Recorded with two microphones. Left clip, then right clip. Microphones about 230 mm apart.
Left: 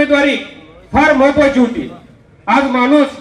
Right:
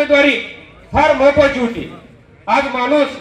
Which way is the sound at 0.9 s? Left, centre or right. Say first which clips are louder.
Left 1 dB; right.